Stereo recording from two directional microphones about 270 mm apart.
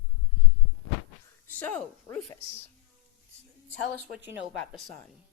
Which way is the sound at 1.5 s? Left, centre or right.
Centre.